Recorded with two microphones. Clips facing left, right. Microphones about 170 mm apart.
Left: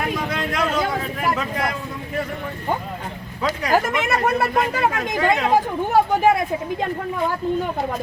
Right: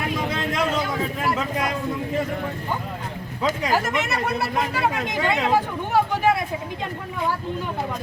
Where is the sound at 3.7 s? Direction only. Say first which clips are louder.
Left 3 dB; 50° left (ahead or behind).